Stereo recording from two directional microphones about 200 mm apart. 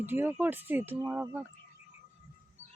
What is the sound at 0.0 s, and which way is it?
Speech, 10° right (ahead or behind).